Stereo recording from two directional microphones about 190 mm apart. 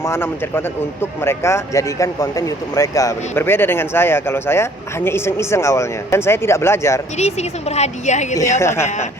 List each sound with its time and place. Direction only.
0.0 s speech: 10° left (ahead or behind)
7.2 s a woman's voice: 35° left (ahead or behind)
8.4 s speech: 15° left (ahead or behind)